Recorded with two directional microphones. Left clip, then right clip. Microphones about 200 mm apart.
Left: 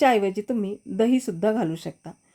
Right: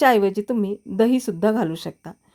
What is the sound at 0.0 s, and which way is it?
A woman's voice, 20° right (ahead or behind).